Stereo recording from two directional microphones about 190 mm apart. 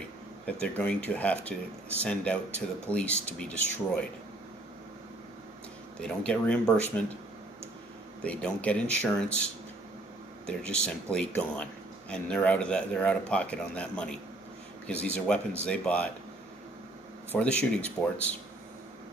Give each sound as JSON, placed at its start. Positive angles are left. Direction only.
{"t": 0.5, "sound": "speech", "side_deg": 5}
{"t": 5.9, "sound": "speech", "side_deg": 5}
{"t": 8.2, "sound": "speech", "side_deg": 5}
{"t": 10.4, "sound": "speech", "side_deg": 5}
{"t": 17.3, "sound": "speech", "side_deg": 5}